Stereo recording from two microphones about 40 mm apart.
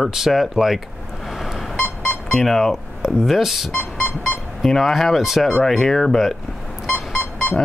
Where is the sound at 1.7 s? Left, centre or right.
Left.